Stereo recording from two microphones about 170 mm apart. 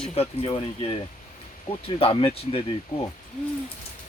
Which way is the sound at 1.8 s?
30° left (ahead or behind).